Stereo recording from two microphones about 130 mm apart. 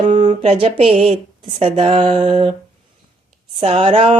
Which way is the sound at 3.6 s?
50° right (ahead or behind).